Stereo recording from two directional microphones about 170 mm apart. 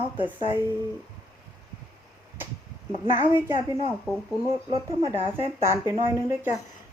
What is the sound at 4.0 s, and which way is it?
Speech, centre (ahead or behind).